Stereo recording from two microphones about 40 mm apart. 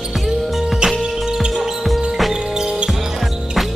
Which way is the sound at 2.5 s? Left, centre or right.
Centre.